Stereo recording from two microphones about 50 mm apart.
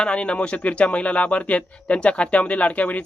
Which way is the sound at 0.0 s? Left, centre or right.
Left.